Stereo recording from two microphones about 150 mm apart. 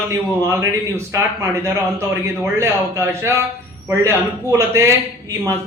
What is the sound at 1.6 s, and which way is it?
A man's voice, 15° right (ahead or behind).